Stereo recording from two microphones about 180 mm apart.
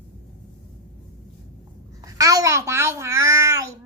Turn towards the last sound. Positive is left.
turn(degrees=-15)  # may be behind; listen again after turning